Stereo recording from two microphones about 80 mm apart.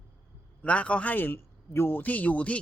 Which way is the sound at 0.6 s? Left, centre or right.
Centre.